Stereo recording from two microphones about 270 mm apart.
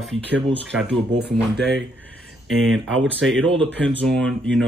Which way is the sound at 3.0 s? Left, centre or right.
Centre.